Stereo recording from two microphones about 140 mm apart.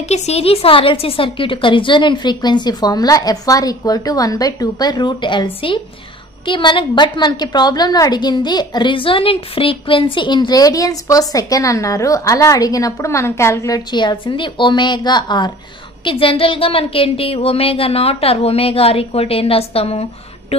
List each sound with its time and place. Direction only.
0.1 s a woman's voice: 45° left (ahead or behind)